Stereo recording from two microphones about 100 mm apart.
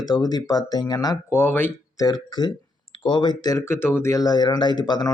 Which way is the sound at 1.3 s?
20° left (ahead or behind).